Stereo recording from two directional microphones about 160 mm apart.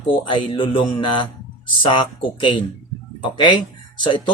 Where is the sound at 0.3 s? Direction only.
30° left (ahead or behind).